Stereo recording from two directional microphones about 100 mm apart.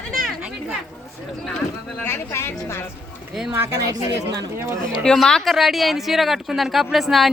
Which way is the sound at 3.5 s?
25° right (ahead or behind).